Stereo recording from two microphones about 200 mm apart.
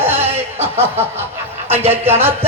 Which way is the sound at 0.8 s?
10° right (ahead or behind).